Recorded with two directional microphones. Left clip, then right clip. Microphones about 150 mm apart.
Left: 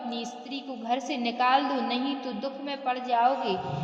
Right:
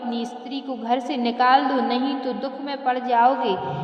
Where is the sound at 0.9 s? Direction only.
25° right (ahead or behind).